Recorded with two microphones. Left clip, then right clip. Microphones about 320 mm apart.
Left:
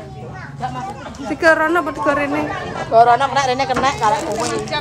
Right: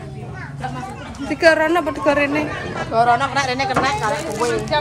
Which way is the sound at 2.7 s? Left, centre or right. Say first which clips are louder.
Left 5 dB; left.